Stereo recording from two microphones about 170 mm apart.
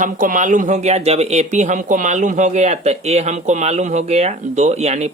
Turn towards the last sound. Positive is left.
turn(degrees=-40)  # may be behind; listen again after turning